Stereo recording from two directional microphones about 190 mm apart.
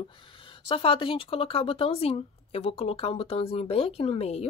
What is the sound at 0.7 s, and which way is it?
Speech, 30° left (ahead or behind).